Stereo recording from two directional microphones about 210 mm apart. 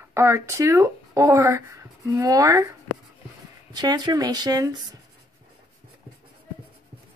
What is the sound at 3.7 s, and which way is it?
Speech, 20° right (ahead or behind).